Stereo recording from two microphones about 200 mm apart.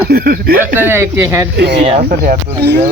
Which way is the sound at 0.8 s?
10° right (ahead or behind).